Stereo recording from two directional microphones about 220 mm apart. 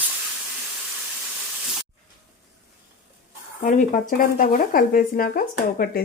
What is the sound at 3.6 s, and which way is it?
Speech, 35° left (ahead or behind).